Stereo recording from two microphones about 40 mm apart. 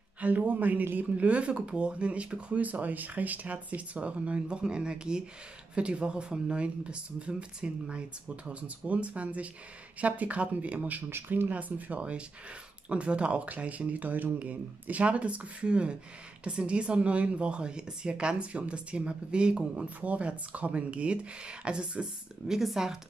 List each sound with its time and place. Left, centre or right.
0.2 s a man's voice: right
0.9 s speech: right
2.6 s speech: right
8.5 s speech: right
11.2 s speech: right
11.5 s speech: right
20.0 s speech: right
22.5 s speech: centre